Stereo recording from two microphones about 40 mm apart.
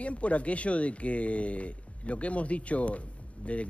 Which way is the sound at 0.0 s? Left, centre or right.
Left.